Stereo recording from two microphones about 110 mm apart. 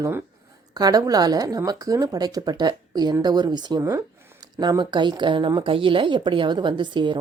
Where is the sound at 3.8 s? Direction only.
30° right (ahead or behind).